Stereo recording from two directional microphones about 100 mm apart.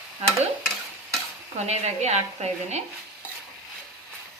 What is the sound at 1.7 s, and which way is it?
Speech, 90° right.